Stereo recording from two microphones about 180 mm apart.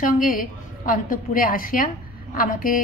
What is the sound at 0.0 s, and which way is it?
A woman's voice, 50° left (ahead or behind).